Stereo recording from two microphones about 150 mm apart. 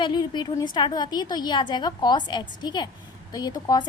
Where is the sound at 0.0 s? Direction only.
30° left (ahead or behind).